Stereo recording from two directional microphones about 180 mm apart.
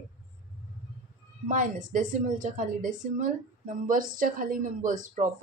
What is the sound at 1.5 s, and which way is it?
Speech, 45° right (ahead or behind).